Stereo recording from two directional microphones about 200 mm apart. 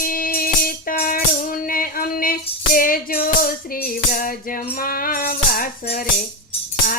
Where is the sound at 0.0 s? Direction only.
45° left (ahead or behind).